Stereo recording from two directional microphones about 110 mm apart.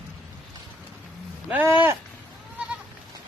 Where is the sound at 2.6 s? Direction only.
15° right (ahead or behind).